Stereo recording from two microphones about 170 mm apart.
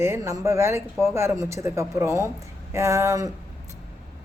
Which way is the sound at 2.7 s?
20° right (ahead or behind).